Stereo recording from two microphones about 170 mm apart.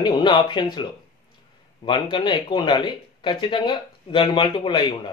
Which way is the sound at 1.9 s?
30° left (ahead or behind).